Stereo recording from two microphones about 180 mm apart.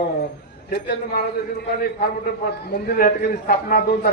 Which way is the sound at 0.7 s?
65° left (ahead or behind).